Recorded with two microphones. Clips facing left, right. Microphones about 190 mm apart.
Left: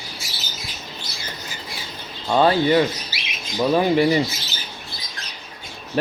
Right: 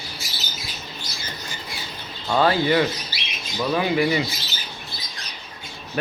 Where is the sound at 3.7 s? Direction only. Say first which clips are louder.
Left 4 dB; 35° left (ahead or behind).